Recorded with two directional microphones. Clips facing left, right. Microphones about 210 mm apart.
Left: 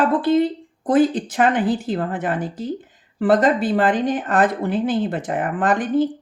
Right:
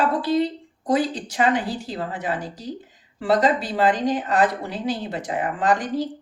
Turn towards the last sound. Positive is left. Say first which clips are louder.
# left 4 dB
turn(degrees=55)  # may be behind; listen again after turning